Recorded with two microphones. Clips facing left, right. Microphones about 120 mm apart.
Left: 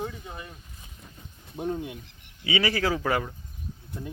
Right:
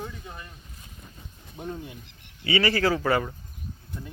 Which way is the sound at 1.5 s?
15° left (ahead or behind).